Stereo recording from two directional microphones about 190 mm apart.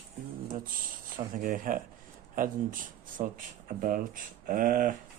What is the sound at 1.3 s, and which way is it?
Speech, 45° right (ahead or behind).